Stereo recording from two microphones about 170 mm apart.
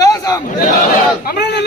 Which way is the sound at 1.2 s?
70° left (ahead or behind).